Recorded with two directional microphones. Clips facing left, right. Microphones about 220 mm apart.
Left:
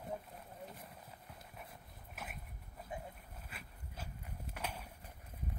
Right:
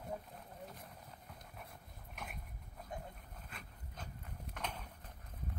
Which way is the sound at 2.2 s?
5° left (ahead or behind).